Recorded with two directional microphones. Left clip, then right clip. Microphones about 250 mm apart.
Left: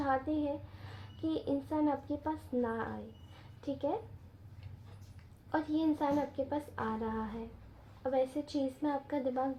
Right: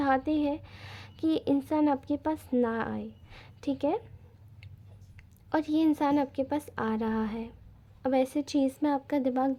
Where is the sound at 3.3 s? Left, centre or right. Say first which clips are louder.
Right 6 dB; right.